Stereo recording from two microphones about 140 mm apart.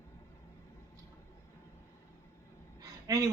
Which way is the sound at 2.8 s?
25° right (ahead or behind).